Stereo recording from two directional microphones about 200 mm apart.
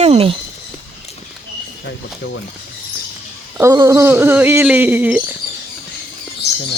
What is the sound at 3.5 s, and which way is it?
Speech, 15° right (ahead or behind).